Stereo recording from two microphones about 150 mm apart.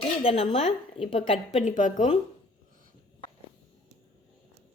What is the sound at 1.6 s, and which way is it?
Speech, 60° left (ahead or behind).